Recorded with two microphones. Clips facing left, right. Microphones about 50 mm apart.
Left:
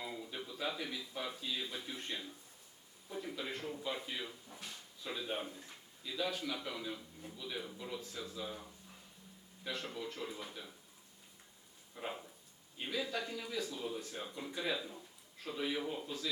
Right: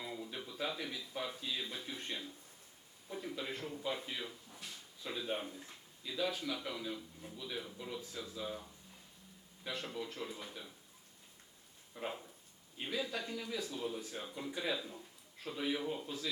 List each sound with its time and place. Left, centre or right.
0.0 s a sound: centre
1.7 s a man's voice: centre
3.3 s a man's voice: centre
5.0 s a man's voice: centre
11.9 s a man's voice: centre